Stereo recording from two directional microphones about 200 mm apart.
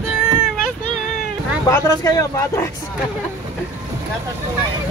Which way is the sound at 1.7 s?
15° left (ahead or behind).